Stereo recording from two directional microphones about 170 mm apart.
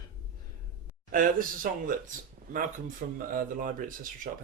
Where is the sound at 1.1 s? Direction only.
55° right (ahead or behind).